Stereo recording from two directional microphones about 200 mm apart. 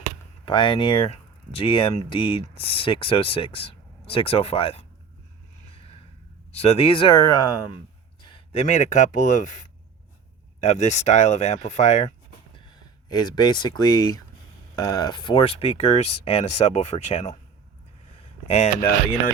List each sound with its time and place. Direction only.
0.4 s speech: 25° left (ahead or behind)
5.6 s gasp: 30° left (ahead or behind)
6.5 s speech: 30° left (ahead or behind)
8.2 s a sound: 25° left (ahead or behind)
8.6 s speech: 35° left (ahead or behind)
13.1 s speech: 20° left (ahead or behind)
18.2 s a sound: 30° left (ahead or behind)